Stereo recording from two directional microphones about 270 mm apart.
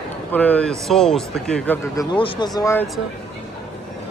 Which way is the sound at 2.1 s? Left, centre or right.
Centre.